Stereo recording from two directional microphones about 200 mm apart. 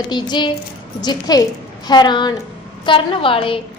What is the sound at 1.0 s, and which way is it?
A woman's voice, 20° left (ahead or behind).